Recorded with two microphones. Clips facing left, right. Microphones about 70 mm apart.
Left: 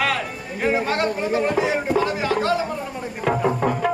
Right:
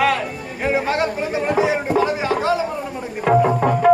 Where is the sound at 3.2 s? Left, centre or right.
Centre.